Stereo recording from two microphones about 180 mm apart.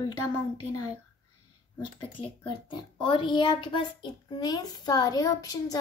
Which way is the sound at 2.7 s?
25° left (ahead or behind).